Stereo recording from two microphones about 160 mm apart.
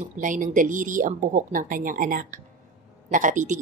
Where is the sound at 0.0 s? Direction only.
55° right (ahead or behind).